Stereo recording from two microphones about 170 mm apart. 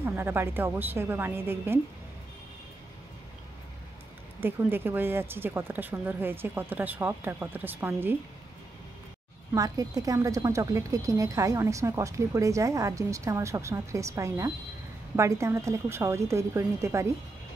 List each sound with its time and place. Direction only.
0.0 s speech: 15° right (ahead or behind)
4.4 s speech: 10° right (ahead or behind)
9.5 s speech: 20° right (ahead or behind)